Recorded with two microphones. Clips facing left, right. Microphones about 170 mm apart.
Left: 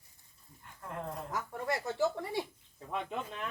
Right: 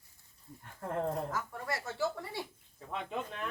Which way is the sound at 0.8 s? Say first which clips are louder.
Right 7 dB; 40° right (ahead or behind).